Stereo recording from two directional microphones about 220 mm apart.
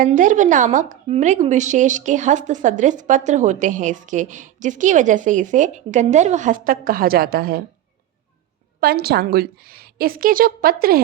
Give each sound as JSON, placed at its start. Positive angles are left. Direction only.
{"t": 0.0, "sound": "a woman's voice", "side_deg": -35}
{"t": 8.8, "sound": "a woman's voice", "side_deg": -45}